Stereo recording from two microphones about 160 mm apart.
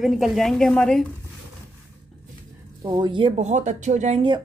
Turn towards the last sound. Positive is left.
turn(degrees=-45)  # may be behind; listen again after turning